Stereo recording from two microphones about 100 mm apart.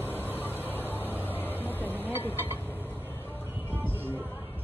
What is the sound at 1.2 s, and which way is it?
Music, 20° left (ahead or behind).